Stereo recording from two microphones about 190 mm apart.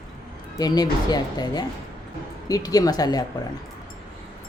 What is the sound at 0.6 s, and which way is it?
A woman's voice, 20° left (ahead or behind).